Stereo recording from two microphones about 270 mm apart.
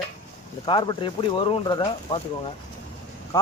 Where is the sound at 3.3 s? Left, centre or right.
Centre.